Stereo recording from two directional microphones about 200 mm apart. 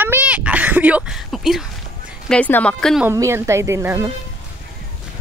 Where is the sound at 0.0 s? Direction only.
10° right (ahead or behind).